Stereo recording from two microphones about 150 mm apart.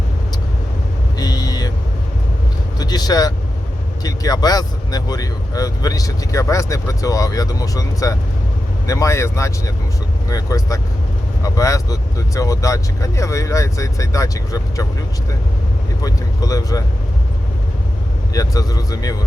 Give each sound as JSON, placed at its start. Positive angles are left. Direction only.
{"t": 1.2, "sound": "vehicle", "side_deg": 25}
{"t": 2.7, "sound": "speech", "side_deg": 25}
{"t": 16.0, "sound": "speech", "side_deg": 25}
{"t": 18.3, "sound": "speech", "side_deg": 25}